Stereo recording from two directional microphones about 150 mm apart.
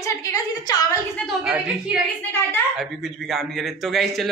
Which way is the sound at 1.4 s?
5° right (ahead or behind).